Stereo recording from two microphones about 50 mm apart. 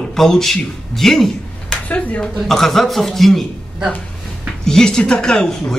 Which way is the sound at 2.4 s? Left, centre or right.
Centre.